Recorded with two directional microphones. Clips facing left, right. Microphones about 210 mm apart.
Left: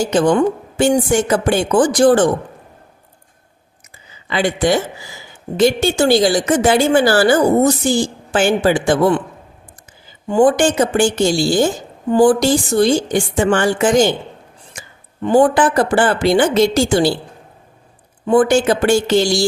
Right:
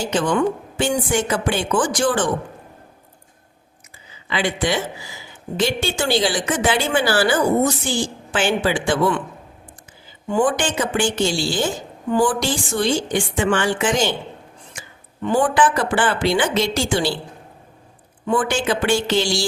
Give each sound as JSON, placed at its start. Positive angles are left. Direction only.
{"t": 0.0, "sound": "a woman's voice", "side_deg": 40}
{"t": 4.3, "sound": "a woman's voice", "side_deg": 45}
{"t": 10.2, "sound": "a woman's voice", "side_deg": 35}
{"t": 18.3, "sound": "a woman's voice", "side_deg": 40}